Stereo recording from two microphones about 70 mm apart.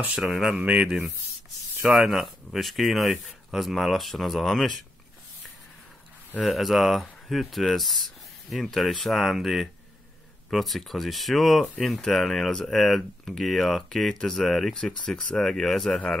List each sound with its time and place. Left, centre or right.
0.2 s speech: centre
0.6 s speech: centre
2.0 s speech: centre
6.4 s speech: centre